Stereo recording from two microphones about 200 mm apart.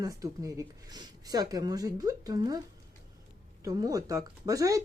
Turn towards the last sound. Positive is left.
turn(degrees=-15)  # may be behind; listen again after turning